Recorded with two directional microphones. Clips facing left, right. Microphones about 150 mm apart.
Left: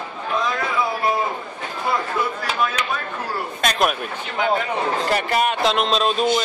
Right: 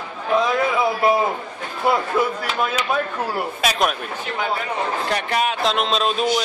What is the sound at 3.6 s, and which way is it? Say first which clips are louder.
Speech: left 2 dB; centre (ahead or behind).